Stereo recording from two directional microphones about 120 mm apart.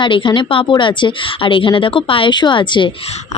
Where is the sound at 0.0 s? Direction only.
45° left (ahead or behind).